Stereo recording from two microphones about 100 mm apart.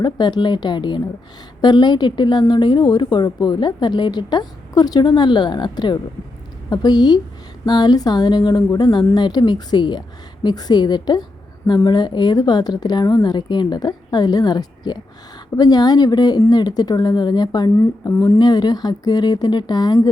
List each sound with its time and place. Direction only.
0.0 s a woman's voice: 50° left (ahead or behind)
17.7 s a woman's voice: 35° left (ahead or behind)